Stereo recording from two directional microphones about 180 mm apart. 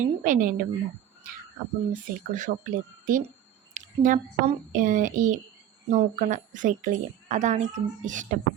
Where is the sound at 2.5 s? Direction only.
45° right (ahead or behind).